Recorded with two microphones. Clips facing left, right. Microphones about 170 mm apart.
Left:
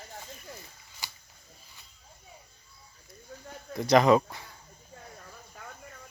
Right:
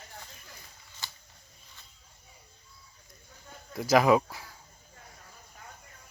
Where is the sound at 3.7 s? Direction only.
5° right (ahead or behind).